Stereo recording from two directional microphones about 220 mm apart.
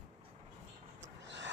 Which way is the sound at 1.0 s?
55° right (ahead or behind).